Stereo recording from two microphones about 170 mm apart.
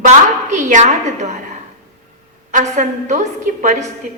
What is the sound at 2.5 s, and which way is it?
A woman's voice, 45° right (ahead or behind).